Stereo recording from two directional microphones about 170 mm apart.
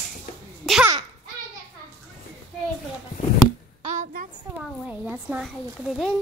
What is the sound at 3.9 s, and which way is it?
Speech, 50° right (ahead or behind).